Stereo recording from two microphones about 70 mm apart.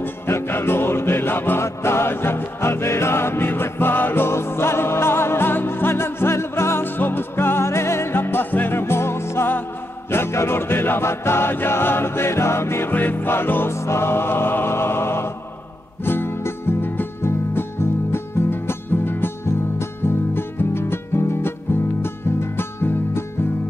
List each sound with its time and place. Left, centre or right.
0.0 s music: left